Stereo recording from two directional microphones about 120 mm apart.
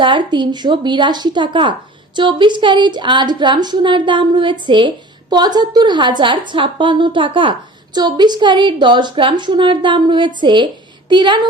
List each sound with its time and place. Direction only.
0.0 s a woman's voice: 40° right (ahead or behind)